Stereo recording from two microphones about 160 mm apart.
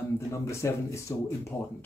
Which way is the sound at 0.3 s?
15° left (ahead or behind).